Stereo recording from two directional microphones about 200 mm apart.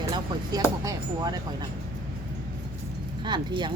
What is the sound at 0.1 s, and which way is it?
Speech, 20° right (ahead or behind).